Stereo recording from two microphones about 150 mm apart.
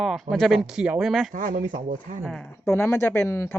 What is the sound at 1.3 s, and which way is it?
Speech, 60° right (ahead or behind).